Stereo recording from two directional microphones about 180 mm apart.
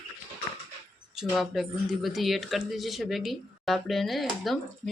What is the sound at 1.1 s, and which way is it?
Speech, centre (ahead or behind).